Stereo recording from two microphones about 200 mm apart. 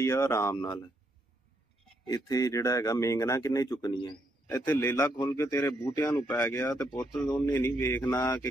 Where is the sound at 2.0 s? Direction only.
15° left (ahead or behind).